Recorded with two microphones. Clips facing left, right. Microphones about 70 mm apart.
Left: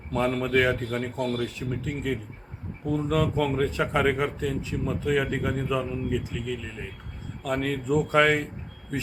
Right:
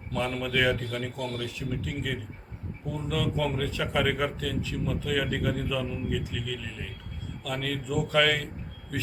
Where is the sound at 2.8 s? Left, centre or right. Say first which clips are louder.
Left 6 dB; left.